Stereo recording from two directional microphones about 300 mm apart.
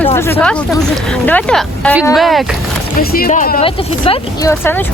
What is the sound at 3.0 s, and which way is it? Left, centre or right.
Speech, left.